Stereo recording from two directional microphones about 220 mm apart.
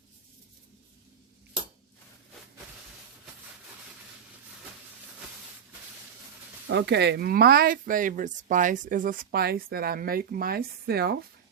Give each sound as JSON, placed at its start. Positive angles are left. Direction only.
{"t": 6.7, "sound": "speech", "side_deg": -50}